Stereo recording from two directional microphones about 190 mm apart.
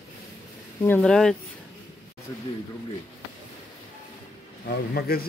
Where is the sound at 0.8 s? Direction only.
5° left (ahead or behind).